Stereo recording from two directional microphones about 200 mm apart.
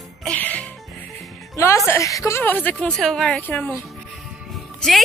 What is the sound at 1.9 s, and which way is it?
Speech, 15° left (ahead or behind).